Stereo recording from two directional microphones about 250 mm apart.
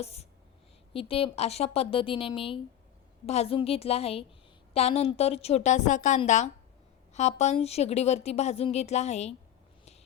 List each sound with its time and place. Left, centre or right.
0.0 s a woman's voice: left